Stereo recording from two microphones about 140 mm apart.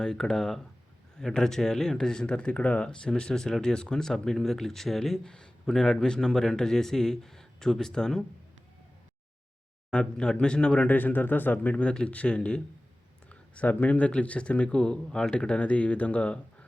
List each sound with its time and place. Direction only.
0.0 s speech: 5° left (ahead or behind)
9.9 s speech: 5° left (ahead or behind)